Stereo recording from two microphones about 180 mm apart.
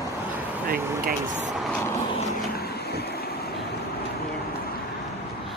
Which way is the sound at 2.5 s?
60° left (ahead or behind).